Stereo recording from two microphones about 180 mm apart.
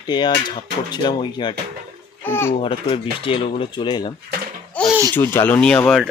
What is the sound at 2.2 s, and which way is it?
Speech, 10° left (ahead or behind).